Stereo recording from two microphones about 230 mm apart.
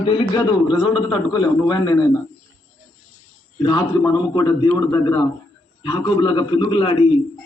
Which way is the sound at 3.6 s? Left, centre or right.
Centre.